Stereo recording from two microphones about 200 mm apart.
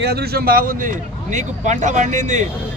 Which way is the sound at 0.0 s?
55° right (ahead or behind).